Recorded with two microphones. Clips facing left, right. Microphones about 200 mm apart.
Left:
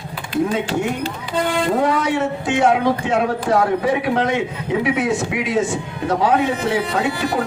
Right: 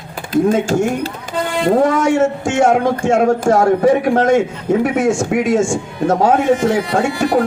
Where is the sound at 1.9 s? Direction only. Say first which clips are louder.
Right 5 dB; 45° right (ahead or behind).